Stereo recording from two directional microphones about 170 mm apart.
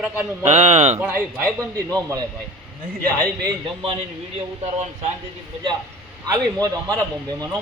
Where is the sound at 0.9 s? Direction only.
15° right (ahead or behind).